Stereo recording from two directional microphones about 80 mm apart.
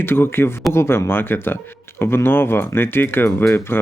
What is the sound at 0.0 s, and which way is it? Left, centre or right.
Speech, left.